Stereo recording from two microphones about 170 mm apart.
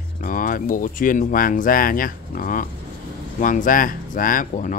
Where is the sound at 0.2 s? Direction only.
55° left (ahead or behind).